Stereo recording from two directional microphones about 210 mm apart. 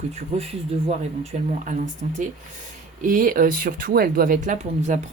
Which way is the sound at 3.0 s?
40° right (ahead or behind).